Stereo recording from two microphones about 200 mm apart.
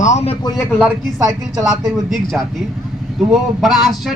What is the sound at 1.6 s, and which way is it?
Speech, centre (ahead or behind).